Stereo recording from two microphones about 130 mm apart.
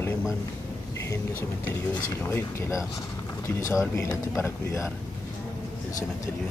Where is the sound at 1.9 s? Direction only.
20° left (ahead or behind).